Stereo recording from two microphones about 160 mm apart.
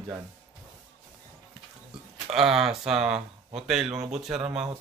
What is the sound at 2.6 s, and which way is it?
Speech, centre (ahead or behind).